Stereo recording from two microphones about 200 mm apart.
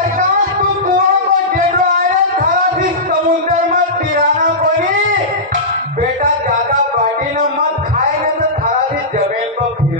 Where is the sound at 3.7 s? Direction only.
40° right (ahead or behind).